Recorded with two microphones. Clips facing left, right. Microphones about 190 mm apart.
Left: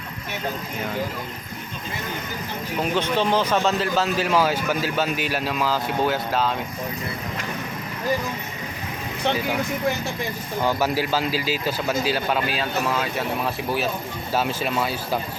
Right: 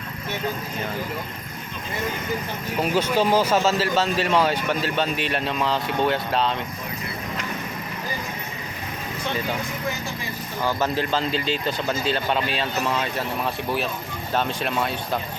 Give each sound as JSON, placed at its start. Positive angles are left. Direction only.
{"t": 2.8, "sound": "speech", "side_deg": -5}
{"t": 10.6, "sound": "speech", "side_deg": 10}